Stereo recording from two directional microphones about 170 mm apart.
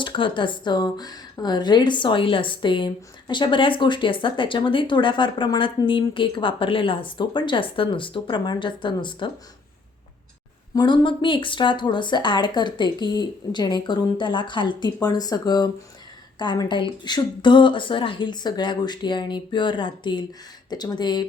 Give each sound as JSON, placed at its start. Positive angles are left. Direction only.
{"t": 0.0, "sound": "speech", "side_deg": 30}
{"t": 10.8, "sound": "speech", "side_deg": 25}